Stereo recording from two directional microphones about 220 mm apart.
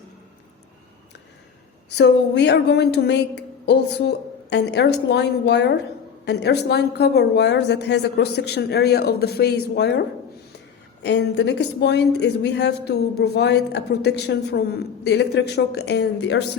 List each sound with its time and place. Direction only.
2.0 s speech: 50° left (ahead or behind)
11.0 s speech: 50° left (ahead or behind)